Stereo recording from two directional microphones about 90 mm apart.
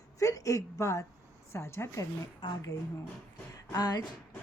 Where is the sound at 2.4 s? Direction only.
60° left (ahead or behind).